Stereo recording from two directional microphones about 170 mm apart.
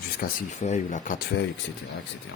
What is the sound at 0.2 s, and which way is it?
Speech, 70° left (ahead or behind).